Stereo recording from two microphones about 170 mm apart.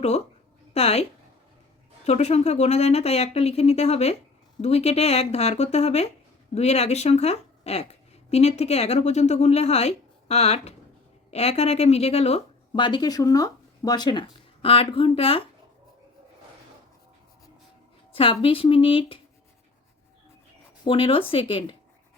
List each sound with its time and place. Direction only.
0.7 s speech: 35° left (ahead or behind)
2.0 s speech: 40° left (ahead or behind)
18.1 s speech: 35° left (ahead or behind)
20.8 s speech: 30° left (ahead or behind)